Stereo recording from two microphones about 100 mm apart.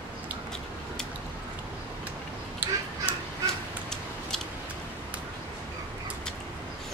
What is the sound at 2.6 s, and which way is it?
Crow, 15° right (ahead or behind).